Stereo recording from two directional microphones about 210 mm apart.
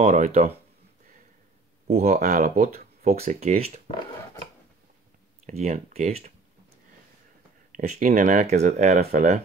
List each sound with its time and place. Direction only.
0.0 s speech: 35° right (ahead or behind)
1.9 s speech: 30° right (ahead or behind)
5.5 s speech: 35° right (ahead or behind)
7.7 s speech: 40° right (ahead or behind)